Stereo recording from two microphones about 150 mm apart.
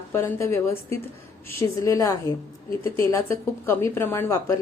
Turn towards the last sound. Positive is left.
turn(degrees=15)  # may be behind; listen again after turning